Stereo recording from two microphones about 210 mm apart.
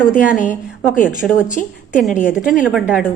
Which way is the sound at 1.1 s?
5° right (ahead or behind).